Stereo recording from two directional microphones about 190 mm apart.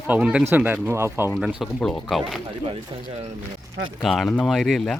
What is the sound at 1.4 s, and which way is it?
Speech, centre (ahead or behind).